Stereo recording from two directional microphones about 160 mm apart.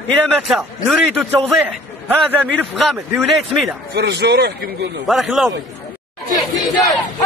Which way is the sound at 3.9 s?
90° right.